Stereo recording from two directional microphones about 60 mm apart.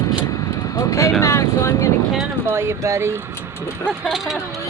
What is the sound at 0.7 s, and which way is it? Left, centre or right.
Speech, left.